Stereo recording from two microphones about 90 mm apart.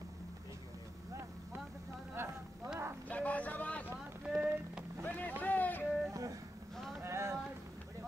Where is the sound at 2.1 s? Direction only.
30° right (ahead or behind).